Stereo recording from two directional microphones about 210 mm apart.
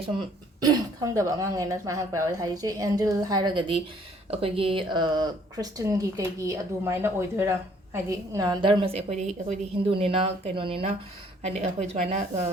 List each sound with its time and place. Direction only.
0.2 s a woman's voice: 20° right (ahead or behind)